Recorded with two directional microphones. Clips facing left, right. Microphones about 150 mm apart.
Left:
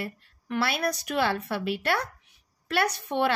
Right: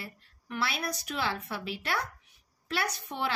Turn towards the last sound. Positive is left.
turn(degrees=65)  # may be behind; listen again after turning